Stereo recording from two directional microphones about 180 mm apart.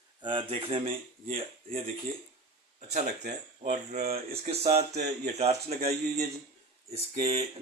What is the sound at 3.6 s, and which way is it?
Speech, 40° right (ahead or behind).